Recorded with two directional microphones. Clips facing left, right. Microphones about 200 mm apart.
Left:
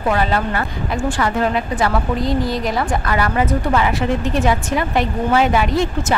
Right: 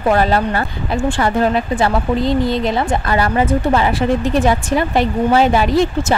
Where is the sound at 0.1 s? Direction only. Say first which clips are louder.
Right 4 dB; 40° right (ahead or behind).